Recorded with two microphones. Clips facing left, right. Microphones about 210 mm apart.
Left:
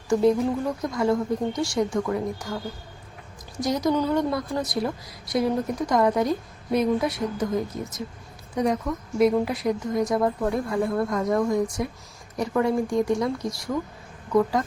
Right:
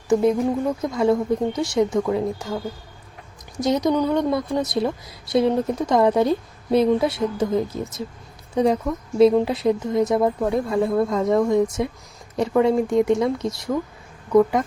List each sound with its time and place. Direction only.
0.1 s a woman's voice: 20° right (ahead or behind)
3.6 s a woman's voice: 20° right (ahead or behind)